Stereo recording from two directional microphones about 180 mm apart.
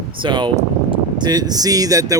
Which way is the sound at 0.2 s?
25° right (ahead or behind).